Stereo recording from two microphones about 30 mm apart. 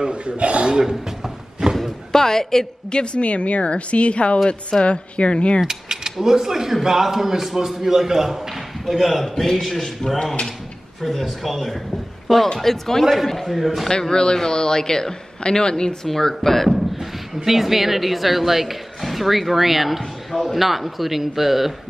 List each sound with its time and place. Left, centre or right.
0.0 s a man's voice: right
1.8 s music: centre
2.9 s speech: left
3.2 s speech: left
5.7 s mechanisms: centre
6.2 s a man's voice: centre
13.8 s a man's voice: left
16.4 s speech: centre